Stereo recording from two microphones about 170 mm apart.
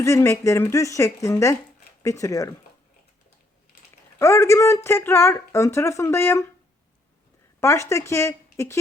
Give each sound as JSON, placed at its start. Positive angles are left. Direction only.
{"t": 0.0, "sound": "speech", "side_deg": 20}
{"t": 4.2, "sound": "speech", "side_deg": 15}
{"t": 7.6, "sound": "speech", "side_deg": 15}